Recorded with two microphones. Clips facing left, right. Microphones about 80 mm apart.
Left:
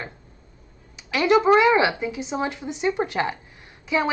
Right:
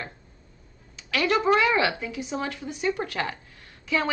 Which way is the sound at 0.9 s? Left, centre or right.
Centre.